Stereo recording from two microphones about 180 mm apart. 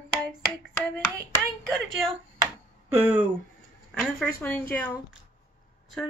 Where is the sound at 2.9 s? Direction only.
10° right (ahead or behind).